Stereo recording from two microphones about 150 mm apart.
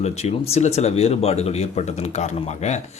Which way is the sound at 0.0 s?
45° left (ahead or behind).